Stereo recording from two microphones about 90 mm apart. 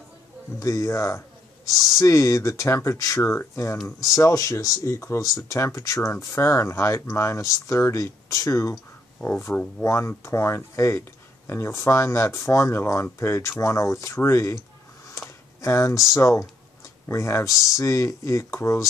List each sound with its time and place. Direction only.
0.6 s speech: 35° left (ahead or behind); by 9.8 s 20° left (ahead or behind)
9.8 s speech: 30° left (ahead or behind)
15.0 s a sound: 30° left (ahead or behind)
16.1 s speech: 35° left (ahead or behind)